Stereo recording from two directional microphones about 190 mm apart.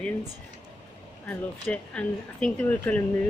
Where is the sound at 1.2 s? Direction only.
5° left (ahead or behind).